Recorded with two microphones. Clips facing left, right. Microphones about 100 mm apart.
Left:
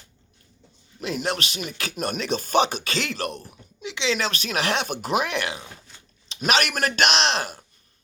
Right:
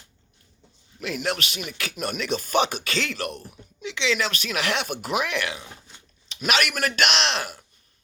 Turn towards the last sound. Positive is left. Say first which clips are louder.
# left 2 dB
turn(degrees=30)  # may be behind; listen again after turning